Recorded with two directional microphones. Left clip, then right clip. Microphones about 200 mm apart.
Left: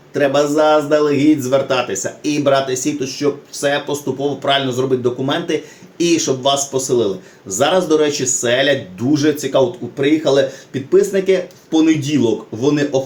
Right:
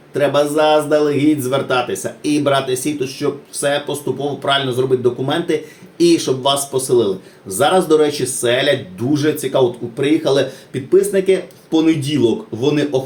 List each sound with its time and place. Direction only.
0.1 s speech: 10° right (ahead or behind)